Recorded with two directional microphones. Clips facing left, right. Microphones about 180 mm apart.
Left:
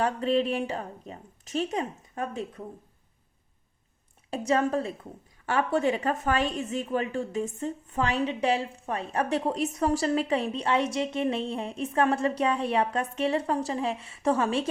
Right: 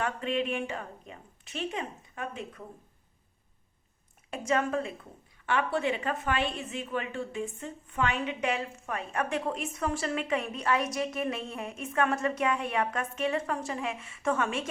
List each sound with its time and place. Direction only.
0.0 s a woman's voice: 35° left (ahead or behind)
4.3 s a woman's voice: 35° left (ahead or behind)